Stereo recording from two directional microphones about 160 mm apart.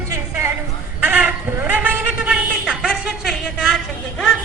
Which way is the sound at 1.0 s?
10° right (ahead or behind).